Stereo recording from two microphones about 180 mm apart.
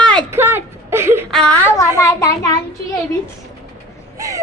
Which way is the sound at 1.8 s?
15° left (ahead or behind).